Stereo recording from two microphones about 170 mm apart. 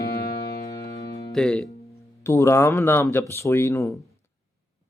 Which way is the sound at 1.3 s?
5° left (ahead or behind).